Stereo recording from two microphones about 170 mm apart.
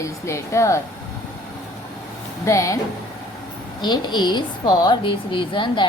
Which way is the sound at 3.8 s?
25° left (ahead or behind).